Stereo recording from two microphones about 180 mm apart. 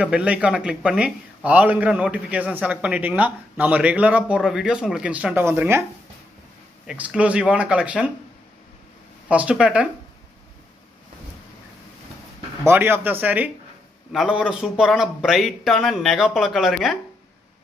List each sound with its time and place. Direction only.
0.0 s a man's voice: 5° right (ahead or behind)
6.9 s a man's voice: 5° right (ahead or behind)
9.3 s a man's voice: 5° right (ahead or behind)
12.6 s a man's voice: 10° right (ahead or behind)